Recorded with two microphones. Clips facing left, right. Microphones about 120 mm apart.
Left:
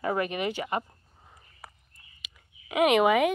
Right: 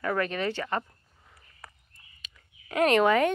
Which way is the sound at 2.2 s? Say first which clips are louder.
Left 1 dB; 10° left (ahead or behind).